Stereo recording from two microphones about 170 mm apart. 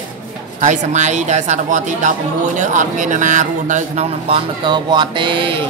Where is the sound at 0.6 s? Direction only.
45° right (ahead or behind); by 5.6 s 30° right (ahead or behind).